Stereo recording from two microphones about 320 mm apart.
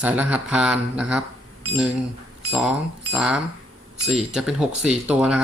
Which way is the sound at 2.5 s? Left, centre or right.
Centre.